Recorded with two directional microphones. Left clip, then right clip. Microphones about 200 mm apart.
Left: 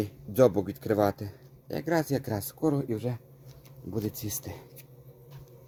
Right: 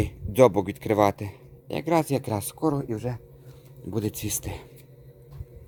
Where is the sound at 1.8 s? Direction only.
20° right (ahead or behind).